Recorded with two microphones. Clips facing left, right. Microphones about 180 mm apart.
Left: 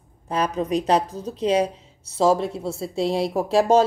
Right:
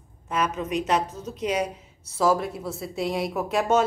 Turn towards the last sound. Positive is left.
turn(degrees=30)  # may be behind; listen again after turning